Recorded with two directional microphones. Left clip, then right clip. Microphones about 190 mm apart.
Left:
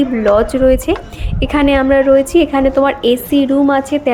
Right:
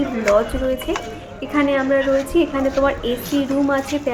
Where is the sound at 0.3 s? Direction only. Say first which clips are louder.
Left 7 dB; 45° left (ahead or behind).